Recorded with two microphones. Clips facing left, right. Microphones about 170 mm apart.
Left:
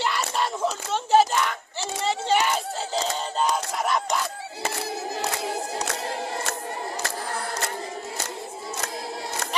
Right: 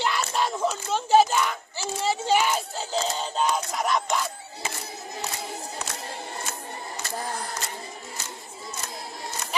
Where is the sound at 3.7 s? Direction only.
Centre (ahead or behind).